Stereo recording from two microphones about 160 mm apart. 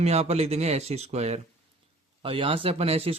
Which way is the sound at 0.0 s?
40° right (ahead or behind).